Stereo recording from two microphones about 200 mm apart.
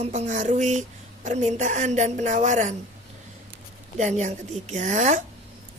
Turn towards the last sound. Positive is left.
turn(degrees=-35)  # may be behind; listen again after turning